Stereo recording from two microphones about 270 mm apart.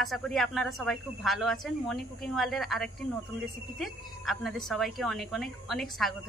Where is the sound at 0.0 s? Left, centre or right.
Centre.